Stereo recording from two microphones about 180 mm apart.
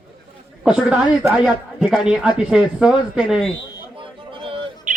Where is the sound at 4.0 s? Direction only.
30° right (ahead or behind).